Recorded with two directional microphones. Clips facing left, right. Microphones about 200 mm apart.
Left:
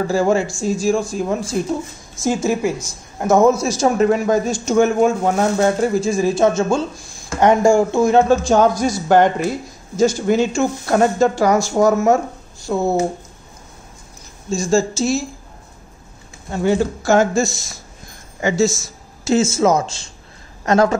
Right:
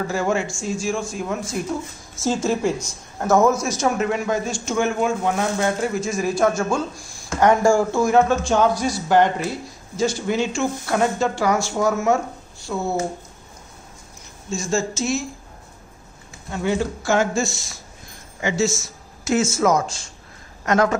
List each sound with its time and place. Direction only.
0.0 s speech: 35° left (ahead or behind)
2.2 s speech: 10° left (ahead or behind)
3.6 s speech: 30° left (ahead or behind)
14.5 s speech: 35° left (ahead or behind)
16.4 s speech: 35° left (ahead or behind)
19.2 s speech: 25° left (ahead or behind)